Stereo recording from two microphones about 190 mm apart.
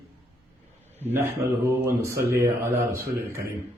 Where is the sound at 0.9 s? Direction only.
10° right (ahead or behind).